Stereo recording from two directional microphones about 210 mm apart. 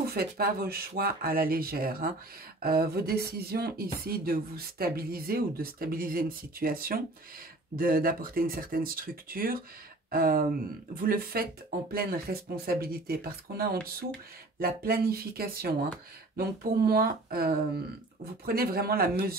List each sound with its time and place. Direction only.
0.0 s speech: 45° right (ahead or behind)